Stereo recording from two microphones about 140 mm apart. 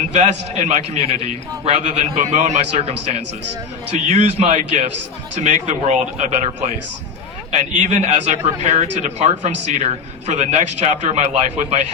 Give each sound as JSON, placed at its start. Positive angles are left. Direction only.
{"t": 0.1, "sound": "a man's voice", "side_deg": -50}